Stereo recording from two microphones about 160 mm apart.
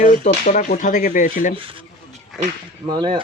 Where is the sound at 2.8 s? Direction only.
25° right (ahead or behind).